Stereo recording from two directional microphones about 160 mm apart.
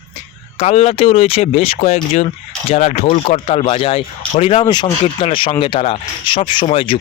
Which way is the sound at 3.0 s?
30° left (ahead or behind).